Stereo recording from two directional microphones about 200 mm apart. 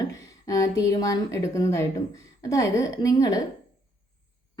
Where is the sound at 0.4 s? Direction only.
15° left (ahead or behind).